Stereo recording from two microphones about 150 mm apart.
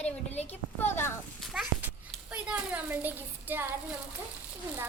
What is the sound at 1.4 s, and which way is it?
A woman's voice, centre (ahead or behind).